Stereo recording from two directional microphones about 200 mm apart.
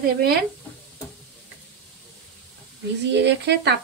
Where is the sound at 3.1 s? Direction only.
60° right (ahead or behind).